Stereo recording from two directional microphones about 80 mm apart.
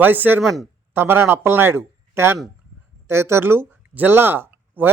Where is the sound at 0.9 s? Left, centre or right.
Right.